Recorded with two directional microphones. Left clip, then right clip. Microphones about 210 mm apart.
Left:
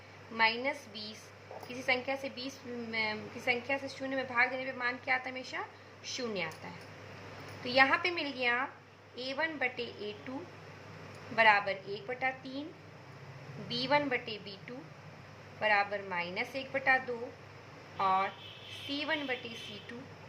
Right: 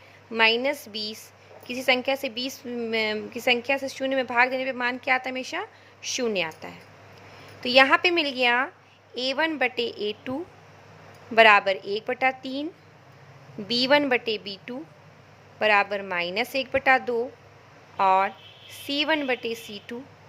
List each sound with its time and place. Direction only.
0.3 s a woman's voice: 50° right (ahead or behind)
7.6 s a woman's voice: 50° right (ahead or behind)
11.3 s a woman's voice: 50° right (ahead or behind)
13.7 s a woman's voice: 50° right (ahead or behind)